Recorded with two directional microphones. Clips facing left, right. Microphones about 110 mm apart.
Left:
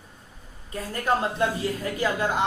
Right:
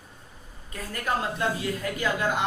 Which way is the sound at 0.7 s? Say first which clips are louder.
Left 4 dB; 30° left (ahead or behind).